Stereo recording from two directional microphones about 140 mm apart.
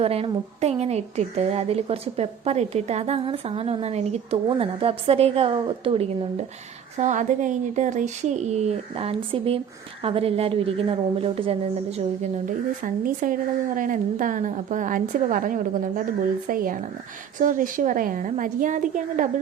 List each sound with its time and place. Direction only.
0.0 s a woman's voice: 45° right (ahead or behind)
6.9 s a woman's voice: 60° right (ahead or behind)
12.5 s a woman's voice: 80° right
17.3 s a woman's voice: 70° right (ahead or behind)